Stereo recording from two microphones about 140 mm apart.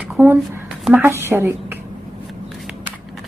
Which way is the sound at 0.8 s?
15° right (ahead or behind).